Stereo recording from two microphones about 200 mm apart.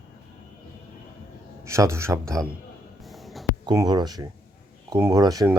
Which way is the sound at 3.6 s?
20° right (ahead or behind).